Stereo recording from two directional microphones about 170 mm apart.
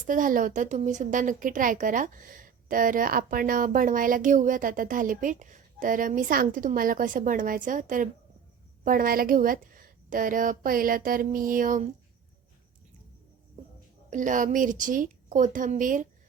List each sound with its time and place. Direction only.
0.0 s a woman's voice: 50° right (ahead or behind)
14.1 s a woman's voice: 50° right (ahead or behind)